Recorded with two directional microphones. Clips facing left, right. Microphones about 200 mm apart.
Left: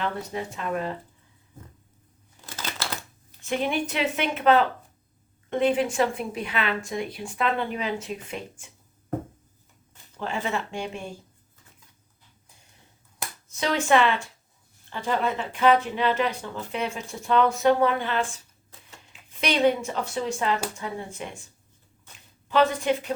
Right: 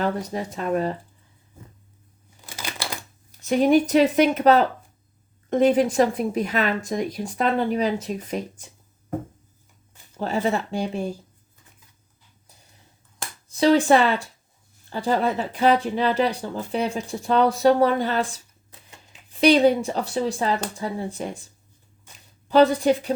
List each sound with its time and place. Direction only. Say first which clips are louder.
0.0 s speech: right 5 dB; 40° right (ahead or behind)
2.5 s a sound: right 1 dB; 10° right (ahead or behind)
3.4 s speech: right 9 dB; 40° right (ahead or behind)
10.2 s speech: right 6 dB; 40° right (ahead or behind)
13.5 s speech: right 6 dB; 35° right (ahead or behind)
22.4 s speech: right 5 dB; 35° right (ahead or behind)